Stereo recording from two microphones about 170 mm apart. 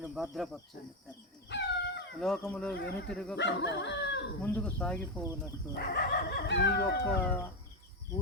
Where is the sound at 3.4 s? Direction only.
90° left.